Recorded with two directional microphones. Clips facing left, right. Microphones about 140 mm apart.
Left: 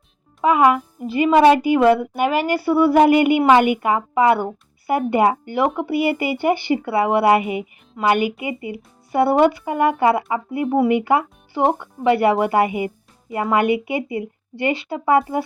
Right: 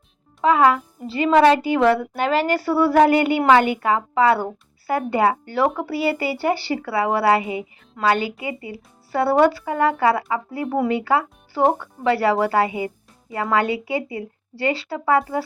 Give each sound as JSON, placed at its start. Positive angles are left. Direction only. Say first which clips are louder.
{"t": 0.4, "sound": "a woman's voice", "louder": "left 1 dB", "side_deg": 15}